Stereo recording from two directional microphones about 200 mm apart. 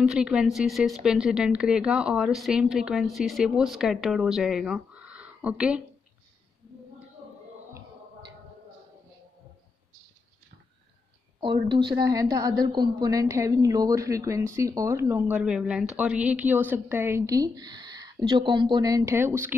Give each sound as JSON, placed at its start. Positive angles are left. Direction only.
{"t": 0.0, "sound": "a woman's voice", "side_deg": -5}
{"t": 11.4, "sound": "a woman's voice", "side_deg": -25}